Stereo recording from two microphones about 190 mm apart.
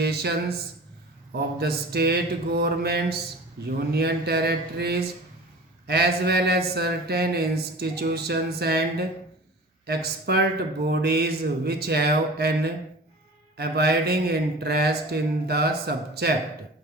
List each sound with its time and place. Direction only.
0.0 s speech: 60° right (ahead or behind)
1.4 s speech: 55° right (ahead or behind)